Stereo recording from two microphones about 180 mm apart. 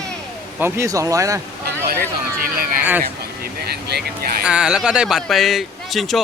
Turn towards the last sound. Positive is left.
turn(degrees=0)  # may be behind; listen again after turning